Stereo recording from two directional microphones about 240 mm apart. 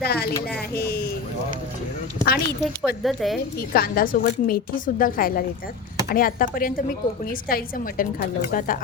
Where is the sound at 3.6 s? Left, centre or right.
Left.